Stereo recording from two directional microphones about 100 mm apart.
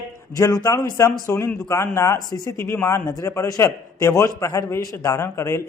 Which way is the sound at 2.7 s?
25° left (ahead or behind).